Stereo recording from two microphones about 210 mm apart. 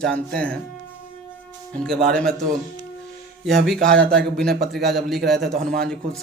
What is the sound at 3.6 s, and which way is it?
Speech, centre (ahead or behind).